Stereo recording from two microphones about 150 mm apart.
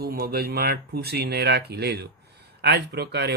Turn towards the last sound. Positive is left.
turn(degrees=-90)